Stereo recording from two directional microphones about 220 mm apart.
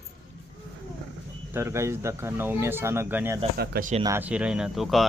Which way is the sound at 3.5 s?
45° right (ahead or behind).